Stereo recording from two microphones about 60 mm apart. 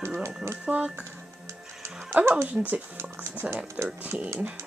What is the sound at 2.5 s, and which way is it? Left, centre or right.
Speech, right.